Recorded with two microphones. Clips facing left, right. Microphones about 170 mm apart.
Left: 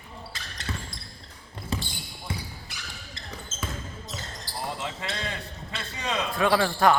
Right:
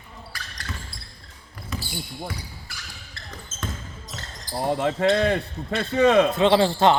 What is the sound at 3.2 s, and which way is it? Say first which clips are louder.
Basketball bounce: even; 20° left (ahead or behind).